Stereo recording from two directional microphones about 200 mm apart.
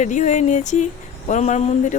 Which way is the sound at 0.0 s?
40° left (ahead or behind).